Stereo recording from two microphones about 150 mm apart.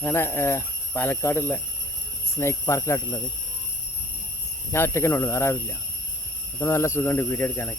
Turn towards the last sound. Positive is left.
turn(degrees=15)  # may be behind; listen again after turning